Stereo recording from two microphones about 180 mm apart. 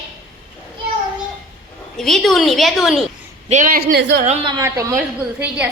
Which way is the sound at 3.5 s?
45° right (ahead or behind).